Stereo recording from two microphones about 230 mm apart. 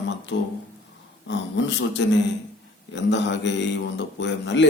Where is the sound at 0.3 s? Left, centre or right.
Left.